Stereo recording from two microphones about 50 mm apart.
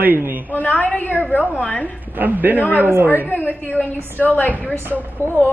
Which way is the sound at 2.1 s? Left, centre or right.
Right.